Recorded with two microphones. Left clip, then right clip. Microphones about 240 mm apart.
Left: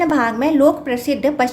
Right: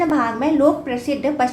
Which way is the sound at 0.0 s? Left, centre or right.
Left.